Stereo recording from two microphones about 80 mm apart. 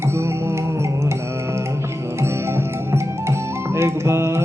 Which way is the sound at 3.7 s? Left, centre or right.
Right.